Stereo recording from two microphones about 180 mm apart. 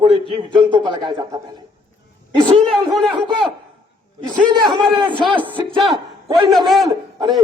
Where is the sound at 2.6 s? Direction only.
Centre (ahead or behind).